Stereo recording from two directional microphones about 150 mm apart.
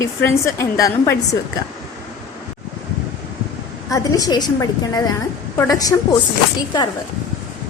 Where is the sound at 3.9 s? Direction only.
25° left (ahead or behind).